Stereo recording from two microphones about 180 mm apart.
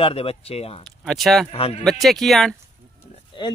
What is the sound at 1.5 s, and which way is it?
Speech, 35° left (ahead or behind).